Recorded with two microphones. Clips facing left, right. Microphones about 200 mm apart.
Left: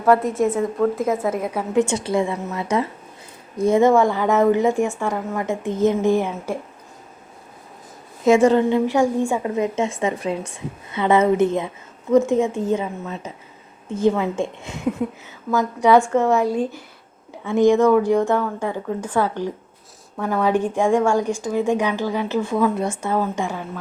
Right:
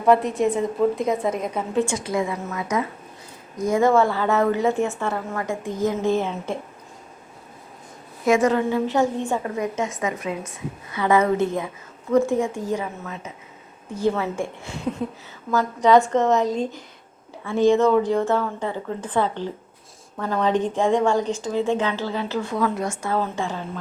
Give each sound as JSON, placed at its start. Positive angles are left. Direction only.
{"t": 0.0, "sound": "a woman's voice", "side_deg": 0}
{"t": 1.8, "sound": "a woman's voice", "side_deg": 25}
{"t": 8.2, "sound": "a woman's voice", "side_deg": 25}
{"t": 8.9, "sound": "a woman's voice", "side_deg": 10}